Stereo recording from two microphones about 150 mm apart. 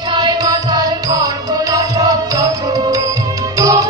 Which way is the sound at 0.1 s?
30° right (ahead or behind).